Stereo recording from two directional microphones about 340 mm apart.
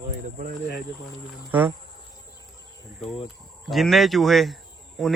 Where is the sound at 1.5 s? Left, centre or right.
Centre.